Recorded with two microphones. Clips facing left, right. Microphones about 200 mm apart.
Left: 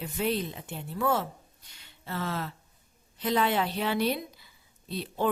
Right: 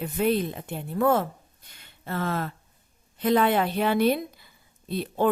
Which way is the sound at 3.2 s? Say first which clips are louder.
Right 5 dB; 55° right (ahead or behind).